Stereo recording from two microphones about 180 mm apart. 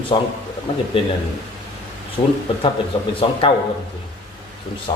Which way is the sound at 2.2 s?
30° left (ahead or behind).